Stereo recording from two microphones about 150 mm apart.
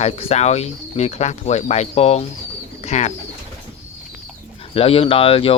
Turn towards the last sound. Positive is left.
turn(degrees=40)  # may be behind; listen again after turning